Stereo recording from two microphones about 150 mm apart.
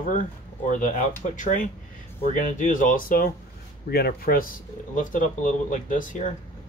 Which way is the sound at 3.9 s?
85° left.